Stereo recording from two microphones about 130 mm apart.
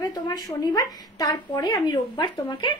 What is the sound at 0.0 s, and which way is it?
A woman's voice, 30° left (ahead or behind).